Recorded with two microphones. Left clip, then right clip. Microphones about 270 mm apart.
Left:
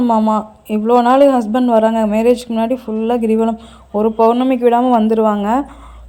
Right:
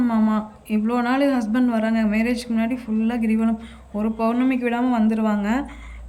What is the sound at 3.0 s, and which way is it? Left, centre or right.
Speech, left.